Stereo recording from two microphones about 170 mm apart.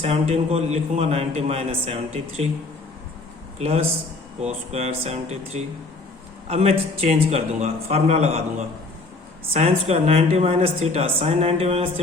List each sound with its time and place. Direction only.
0.0 s a man's voice: 40° right (ahead or behind)
3.6 s a man's voice: 35° right (ahead or behind)